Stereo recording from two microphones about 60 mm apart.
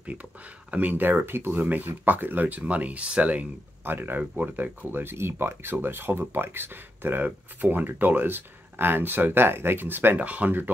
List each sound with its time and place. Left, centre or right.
0.7 s speech: right